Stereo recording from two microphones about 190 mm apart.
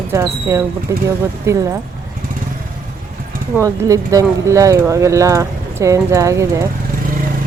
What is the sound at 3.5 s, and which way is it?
Speech, 15° right (ahead or behind).